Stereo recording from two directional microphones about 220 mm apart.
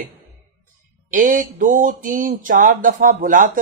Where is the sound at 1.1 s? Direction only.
35° right (ahead or behind).